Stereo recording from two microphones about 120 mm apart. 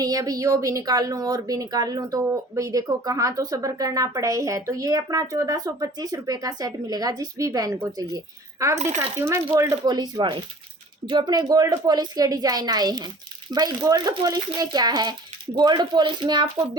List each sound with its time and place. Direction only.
0.0 s speech: 30° right (ahead or behind)
9.6 s speech: 30° right (ahead or behind)